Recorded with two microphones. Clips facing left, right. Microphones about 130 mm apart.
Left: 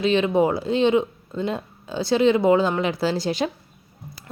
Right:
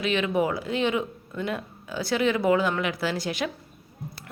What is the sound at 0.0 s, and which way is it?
A woman's voice, 30° left (ahead or behind).